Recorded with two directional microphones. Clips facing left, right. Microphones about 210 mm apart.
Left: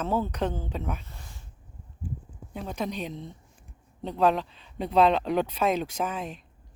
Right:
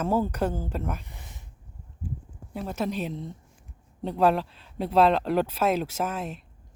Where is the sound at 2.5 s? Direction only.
5° right (ahead or behind).